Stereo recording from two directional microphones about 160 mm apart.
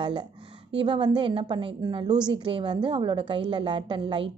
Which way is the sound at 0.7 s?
30° right (ahead or behind).